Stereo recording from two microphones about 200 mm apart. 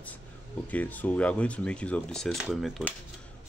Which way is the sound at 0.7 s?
10° left (ahead or behind).